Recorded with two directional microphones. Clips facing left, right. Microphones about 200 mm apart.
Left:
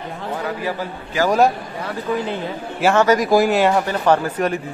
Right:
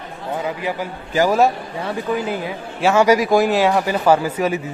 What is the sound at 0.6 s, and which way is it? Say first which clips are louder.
Speech: even; 20° right (ahead or behind).